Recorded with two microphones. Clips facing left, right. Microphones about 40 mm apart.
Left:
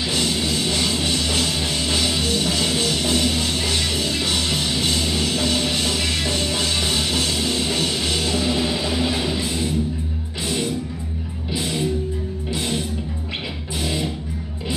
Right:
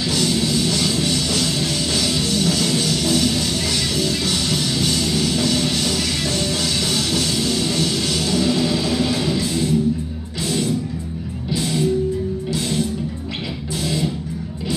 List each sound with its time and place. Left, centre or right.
0.0 s music: left